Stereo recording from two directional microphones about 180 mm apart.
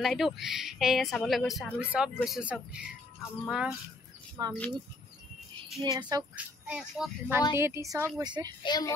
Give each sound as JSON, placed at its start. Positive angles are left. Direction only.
{"t": 0.0, "sound": "speech", "side_deg": 0}
{"t": 4.4, "sound": "a child's voice", "side_deg": -20}
{"t": 5.9, "sound": "a child's voice", "side_deg": -20}
{"t": 6.3, "sound": "a child's voice", "side_deg": -5}
{"t": 8.6, "sound": "a child's voice", "side_deg": 20}